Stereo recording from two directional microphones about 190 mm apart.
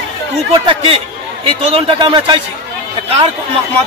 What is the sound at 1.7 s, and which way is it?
Speech, 25° right (ahead or behind).